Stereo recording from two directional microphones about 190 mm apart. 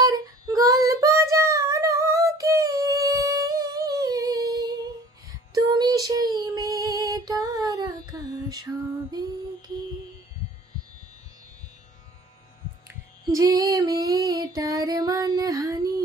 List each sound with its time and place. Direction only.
0.0 s child singing: 20° right (ahead or behind)
13.3 s female singing: 20° right (ahead or behind)